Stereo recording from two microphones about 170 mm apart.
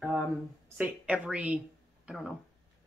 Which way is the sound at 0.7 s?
10° right (ahead or behind).